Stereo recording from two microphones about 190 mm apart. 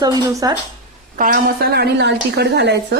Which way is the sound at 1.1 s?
45° right (ahead or behind).